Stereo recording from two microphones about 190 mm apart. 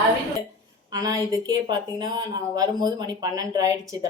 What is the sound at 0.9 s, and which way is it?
A woman's voice, 20° right (ahead or behind).